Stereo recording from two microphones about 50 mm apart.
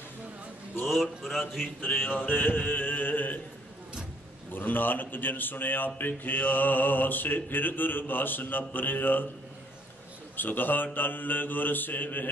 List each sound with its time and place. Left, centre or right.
0.8 s speech: centre
1.8 s music: left
2.2 s mantra: left
4.5 s mantra: left
10.3 s mantra: left